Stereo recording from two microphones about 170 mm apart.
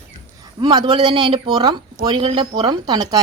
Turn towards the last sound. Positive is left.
turn(degrees=-25)  # may be behind; listen again after turning